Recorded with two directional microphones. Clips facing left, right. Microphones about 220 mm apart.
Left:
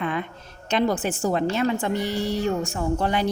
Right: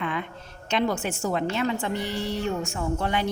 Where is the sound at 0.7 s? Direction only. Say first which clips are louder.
Left 3 dB; 40° left (ahead or behind).